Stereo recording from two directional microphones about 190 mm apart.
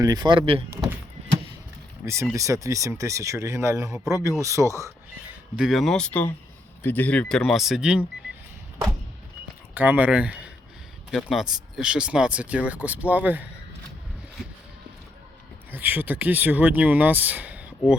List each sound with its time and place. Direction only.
0.0 s speech: 20° right (ahead or behind)
2.3 s speech: 15° right (ahead or behind)
5.5 s speech: centre (ahead or behind)
9.7 s speech: 10° right (ahead or behind)
15.7 s speech: 10° right (ahead or behind)